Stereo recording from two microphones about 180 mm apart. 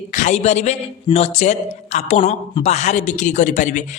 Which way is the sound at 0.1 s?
40° left (ahead or behind).